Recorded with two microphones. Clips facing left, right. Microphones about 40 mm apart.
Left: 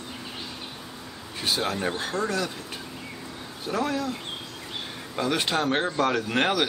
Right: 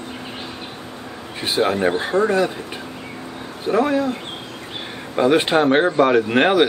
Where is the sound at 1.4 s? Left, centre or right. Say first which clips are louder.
Right 8 dB; right.